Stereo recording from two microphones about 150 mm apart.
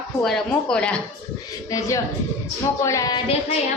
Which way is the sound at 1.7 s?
20° left (ahead or behind).